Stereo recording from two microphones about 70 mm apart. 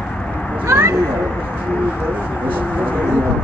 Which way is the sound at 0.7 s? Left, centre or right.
Right.